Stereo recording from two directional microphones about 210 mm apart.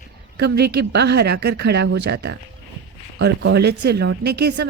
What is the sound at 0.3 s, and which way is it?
A woman's voice, 50° right (ahead or behind).